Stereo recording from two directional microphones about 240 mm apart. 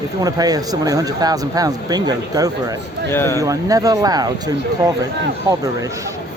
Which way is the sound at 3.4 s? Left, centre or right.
Centre.